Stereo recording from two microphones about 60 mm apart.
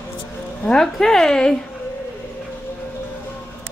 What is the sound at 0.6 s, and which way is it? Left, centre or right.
Speech, centre.